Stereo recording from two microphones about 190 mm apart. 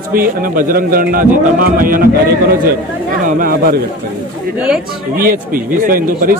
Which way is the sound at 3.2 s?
50° right (ahead or behind).